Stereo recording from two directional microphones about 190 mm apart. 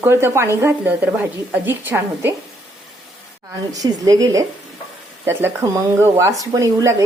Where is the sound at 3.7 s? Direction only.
20° right (ahead or behind).